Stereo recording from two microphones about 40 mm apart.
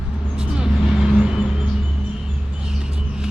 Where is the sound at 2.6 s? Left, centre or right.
Centre.